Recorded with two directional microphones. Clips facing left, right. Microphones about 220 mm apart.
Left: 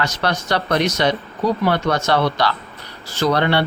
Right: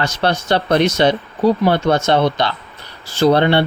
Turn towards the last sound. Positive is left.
turn(degrees=-25)  # may be behind; listen again after turning